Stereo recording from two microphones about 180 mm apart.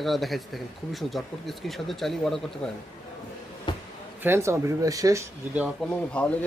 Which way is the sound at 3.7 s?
25° left (ahead or behind).